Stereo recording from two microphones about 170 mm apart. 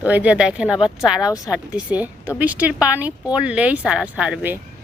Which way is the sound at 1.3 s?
20° left (ahead or behind).